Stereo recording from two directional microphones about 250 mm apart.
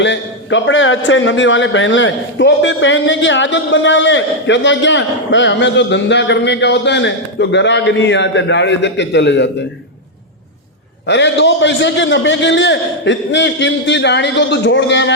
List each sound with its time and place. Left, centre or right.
0.0 s a man's voice: left
11.0 s a man's voice: left